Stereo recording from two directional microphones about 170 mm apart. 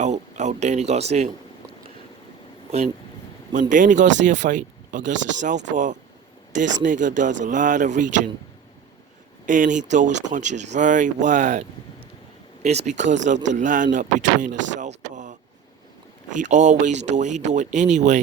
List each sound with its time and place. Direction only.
0.0 s speech: 45° right (ahead or behind)
3.5 s speech: 50° right (ahead or behind)
9.5 s speech: 50° right (ahead or behind)
12.6 s speech: 40° right (ahead or behind)
14.8 s a sound: 45° right (ahead or behind)
16.3 s speech: 45° right (ahead or behind)